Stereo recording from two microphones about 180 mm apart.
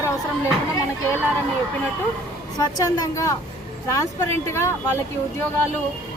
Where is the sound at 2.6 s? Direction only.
20° left (ahead or behind).